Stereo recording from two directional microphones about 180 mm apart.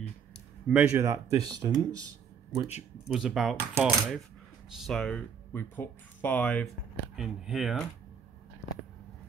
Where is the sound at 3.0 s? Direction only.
Centre (ahead or behind).